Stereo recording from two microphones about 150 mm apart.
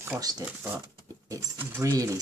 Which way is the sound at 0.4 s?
10° right (ahead or behind).